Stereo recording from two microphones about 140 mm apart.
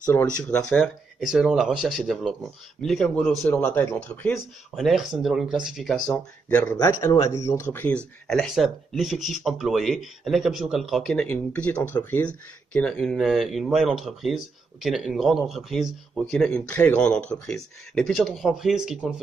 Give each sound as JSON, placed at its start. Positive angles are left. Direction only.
{"t": 0.0, "sound": "speech", "side_deg": 15}
{"t": 4.7, "sound": "speech", "side_deg": 0}
{"t": 6.5, "sound": "speech", "side_deg": 15}
{"t": 7.7, "sound": "speech", "side_deg": 10}